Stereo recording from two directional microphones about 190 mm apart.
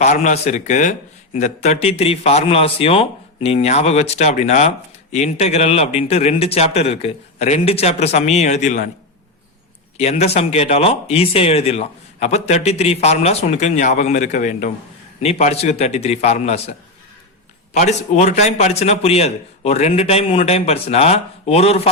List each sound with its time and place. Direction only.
0.0 s speech: 40° left (ahead or behind)
10.0 s speech: 35° left (ahead or behind)
17.7 s speech: 35° left (ahead or behind)